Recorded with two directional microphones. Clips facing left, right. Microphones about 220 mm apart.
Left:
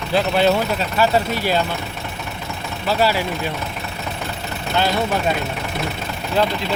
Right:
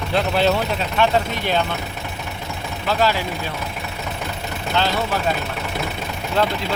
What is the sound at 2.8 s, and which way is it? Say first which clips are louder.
Speech: left 1 dB; 10° left (ahead or behind).